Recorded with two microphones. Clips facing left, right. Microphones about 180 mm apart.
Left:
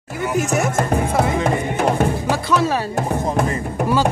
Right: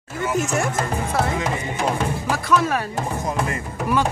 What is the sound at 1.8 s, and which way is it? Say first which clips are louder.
Music: left 4 dB; 60° left (ahead or behind).